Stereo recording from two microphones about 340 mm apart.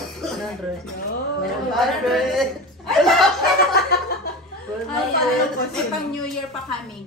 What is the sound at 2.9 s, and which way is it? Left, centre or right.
Chuckle, centre.